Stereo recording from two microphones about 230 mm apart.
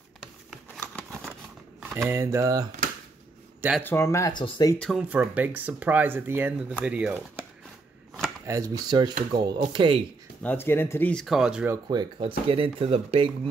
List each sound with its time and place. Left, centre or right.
0.2 s a sound: centre
1.8 s speech: centre
3.8 s speech: centre
4.7 s speech: centre
8.5 s speech: centre
10.4 s speech: centre; by 13.3 s right